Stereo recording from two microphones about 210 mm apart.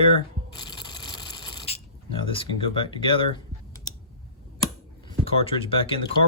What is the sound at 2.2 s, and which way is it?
Speech, 25° left (ahead or behind).